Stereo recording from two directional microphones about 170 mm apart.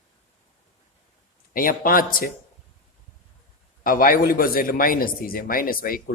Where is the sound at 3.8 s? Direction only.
55° left (ahead or behind).